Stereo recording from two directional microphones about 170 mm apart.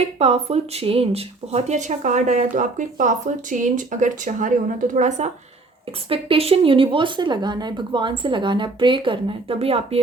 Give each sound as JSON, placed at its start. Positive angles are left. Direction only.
{"t": 0.2, "sound": "speech", "side_deg": -35}
{"t": 6.1, "sound": "speech", "side_deg": -35}